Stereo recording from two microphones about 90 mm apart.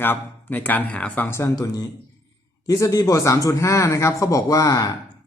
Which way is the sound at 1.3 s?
35° left (ahead or behind).